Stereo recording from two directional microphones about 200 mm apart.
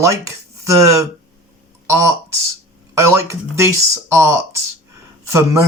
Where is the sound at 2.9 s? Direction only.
15° right (ahead or behind).